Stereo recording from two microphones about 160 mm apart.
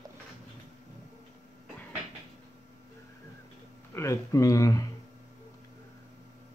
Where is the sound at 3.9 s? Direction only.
20° left (ahead or behind).